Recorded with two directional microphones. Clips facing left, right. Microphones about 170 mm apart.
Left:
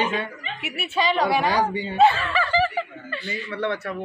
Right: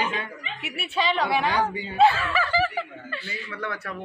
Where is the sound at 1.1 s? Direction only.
40° left (ahead or behind).